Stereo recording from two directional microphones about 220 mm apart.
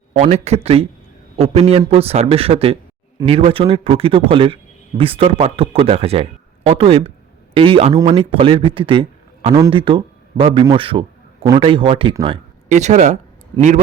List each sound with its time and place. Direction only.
0.1 s a man's voice: 30° right (ahead or behind)